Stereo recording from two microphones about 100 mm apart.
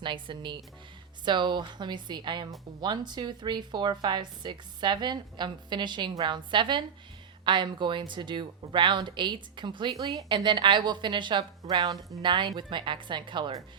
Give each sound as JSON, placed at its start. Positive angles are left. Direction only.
{"t": 0.0, "sound": "speech", "side_deg": -55}
{"t": 11.6, "sound": "speech", "side_deg": -40}